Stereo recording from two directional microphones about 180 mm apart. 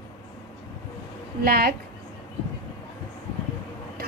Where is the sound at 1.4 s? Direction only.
55° right (ahead or behind).